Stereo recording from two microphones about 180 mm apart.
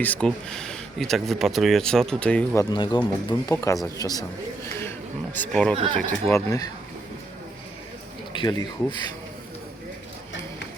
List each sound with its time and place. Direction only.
0.0 s speech: 5° left (ahead or behind)
2.6 s speech: 25° left (ahead or behind); by 5.7 s 10° left (ahead or behind)
5.7 s speech: 35° right (ahead or behind)
6.1 s speech: 15° left (ahead or behind)
8.4 s speech: 25° left (ahead or behind)